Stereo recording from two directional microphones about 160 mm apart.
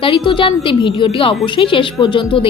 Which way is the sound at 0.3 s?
30° left (ahead or behind).